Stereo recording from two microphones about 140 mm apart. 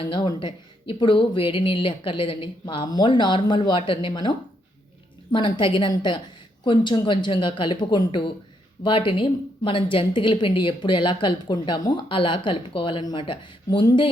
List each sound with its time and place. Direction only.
0.0 s speech: 40° left (ahead or behind)